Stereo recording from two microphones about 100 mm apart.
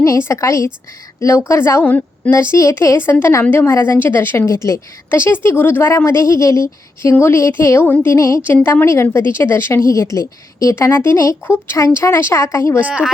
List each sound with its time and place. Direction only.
0.0 s a woman's voice: 30° left (ahead or behind)
1.8 s a woman's voice: 15° left (ahead or behind)
2.3 s a woman's voice: 25° left (ahead or behind)
12.8 s speech: 10° right (ahead or behind)